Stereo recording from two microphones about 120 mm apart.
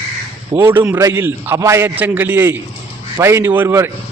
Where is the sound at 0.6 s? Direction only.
20° right (ahead or behind).